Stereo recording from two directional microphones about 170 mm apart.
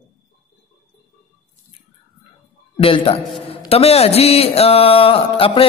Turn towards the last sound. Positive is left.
turn(degrees=35)  # may be behind; listen again after turning